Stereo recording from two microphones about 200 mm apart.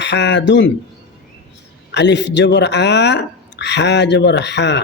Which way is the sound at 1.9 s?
60° left (ahead or behind).